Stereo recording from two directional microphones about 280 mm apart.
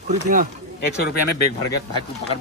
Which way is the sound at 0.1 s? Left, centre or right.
Right.